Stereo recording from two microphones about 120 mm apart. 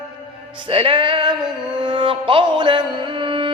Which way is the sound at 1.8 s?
40° right (ahead or behind).